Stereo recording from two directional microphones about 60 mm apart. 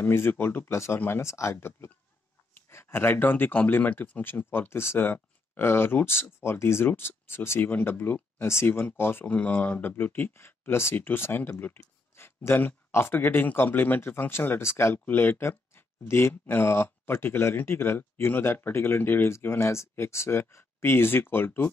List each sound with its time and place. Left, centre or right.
0.0 s speech: left
1.2 s speech: left
9.2 s speech: left
15.0 s speech: left